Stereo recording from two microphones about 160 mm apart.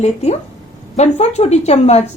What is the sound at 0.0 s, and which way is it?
A woman's voice, 45° left (ahead or behind).